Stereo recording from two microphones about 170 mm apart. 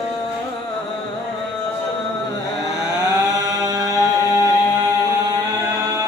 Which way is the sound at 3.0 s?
20° right (ahead or behind).